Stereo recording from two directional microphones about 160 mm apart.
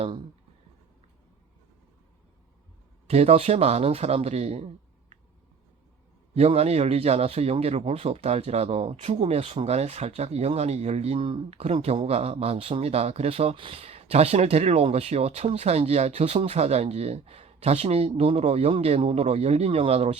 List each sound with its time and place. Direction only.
3.1 s speech: 40° right (ahead or behind)
6.3 s speech: 40° right (ahead or behind)